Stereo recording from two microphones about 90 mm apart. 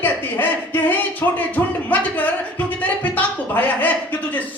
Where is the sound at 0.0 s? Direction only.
20° left (ahead or behind).